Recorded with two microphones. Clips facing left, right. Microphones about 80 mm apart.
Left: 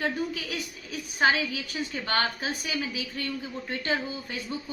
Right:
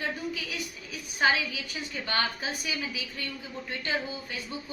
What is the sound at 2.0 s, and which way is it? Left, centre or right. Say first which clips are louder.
Speech: left 2 dB; left.